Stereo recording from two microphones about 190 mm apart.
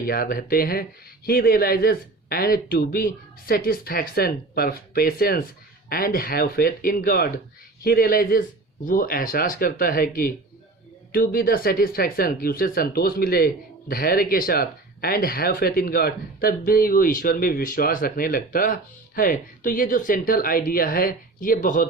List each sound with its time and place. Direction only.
0.0 s speech: 50° left (ahead or behind)